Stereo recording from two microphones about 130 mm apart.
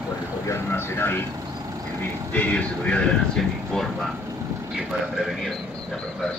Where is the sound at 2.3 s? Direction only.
10° left (ahead or behind).